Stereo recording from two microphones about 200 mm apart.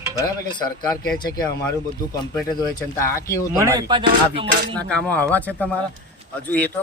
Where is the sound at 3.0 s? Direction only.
15° left (ahead or behind).